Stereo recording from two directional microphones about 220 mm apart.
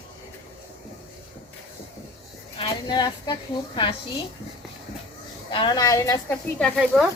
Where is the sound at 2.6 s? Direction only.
20° left (ahead or behind).